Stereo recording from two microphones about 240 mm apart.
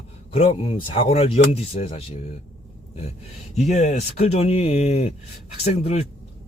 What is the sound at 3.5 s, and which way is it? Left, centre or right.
A man's voice, left.